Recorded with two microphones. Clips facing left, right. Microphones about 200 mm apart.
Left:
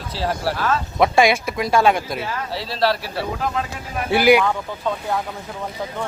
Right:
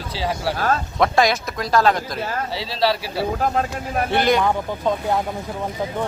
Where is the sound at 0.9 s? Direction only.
5° left (ahead or behind).